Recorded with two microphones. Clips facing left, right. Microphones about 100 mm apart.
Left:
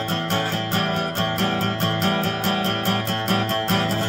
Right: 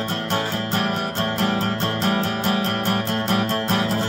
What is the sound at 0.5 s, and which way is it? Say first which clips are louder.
Music: even; 20° right (ahead or behind).